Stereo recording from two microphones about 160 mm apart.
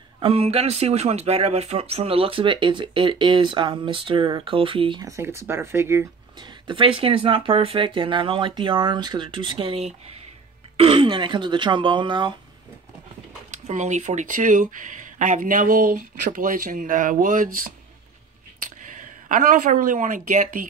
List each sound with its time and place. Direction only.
0.2 s speech: 35° right (ahead or behind)
5.0 s speech: 15° right (ahead or behind)
6.4 s speech: 30° right (ahead or behind)
13.5 s speech: 45° right (ahead or behind)
19.2 s speech: 55° right (ahead or behind)